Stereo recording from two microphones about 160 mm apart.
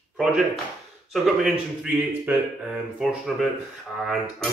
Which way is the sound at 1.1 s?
Centre (ahead or behind).